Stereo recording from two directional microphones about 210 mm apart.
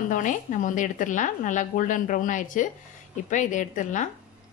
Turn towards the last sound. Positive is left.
turn(degrees=35)  # may be behind; listen again after turning